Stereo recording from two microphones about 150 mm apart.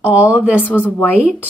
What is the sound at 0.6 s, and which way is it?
Speech, 10° left (ahead or behind).